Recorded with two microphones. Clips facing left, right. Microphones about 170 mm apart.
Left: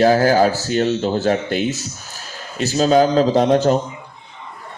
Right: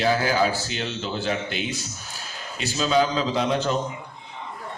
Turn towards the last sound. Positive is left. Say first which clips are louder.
# left 9 dB
turn(degrees=45)  # may be behind; listen again after turning